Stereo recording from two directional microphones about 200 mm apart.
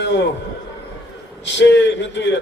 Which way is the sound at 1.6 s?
60° left (ahead or behind).